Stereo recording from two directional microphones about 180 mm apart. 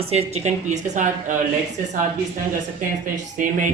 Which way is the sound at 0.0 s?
35° right (ahead or behind).